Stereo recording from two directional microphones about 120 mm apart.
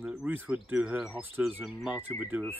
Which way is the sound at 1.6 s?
Centre (ahead or behind).